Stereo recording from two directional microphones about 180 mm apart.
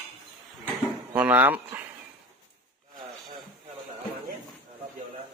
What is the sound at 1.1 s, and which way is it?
Speech, 10° right (ahead or behind).